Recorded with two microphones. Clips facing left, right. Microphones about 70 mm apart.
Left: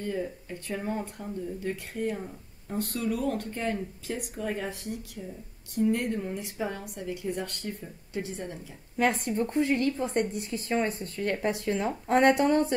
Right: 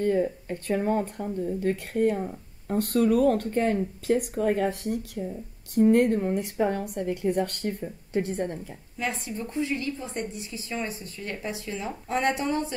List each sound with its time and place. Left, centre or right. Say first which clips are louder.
0.0 s a woman's voice: right 8 dB; right
8.9 s speech: left 6 dB; left